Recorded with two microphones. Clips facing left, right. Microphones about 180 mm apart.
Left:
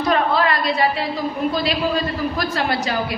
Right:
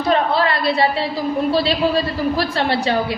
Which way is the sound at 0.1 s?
30° right (ahead or behind).